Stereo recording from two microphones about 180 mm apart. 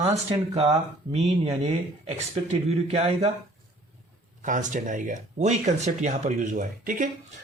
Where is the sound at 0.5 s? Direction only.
35° right (ahead or behind).